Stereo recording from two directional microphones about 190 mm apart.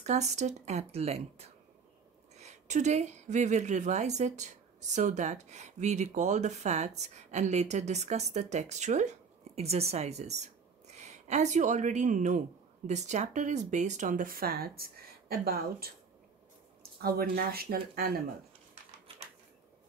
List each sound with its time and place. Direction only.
0.0 s a woman's voice: 35° right (ahead or behind); by 15.9 s 50° right (ahead or behind)
17.0 s speech: 50° right (ahead or behind)